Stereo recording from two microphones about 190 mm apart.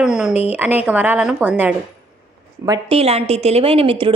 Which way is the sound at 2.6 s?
25° right (ahead or behind).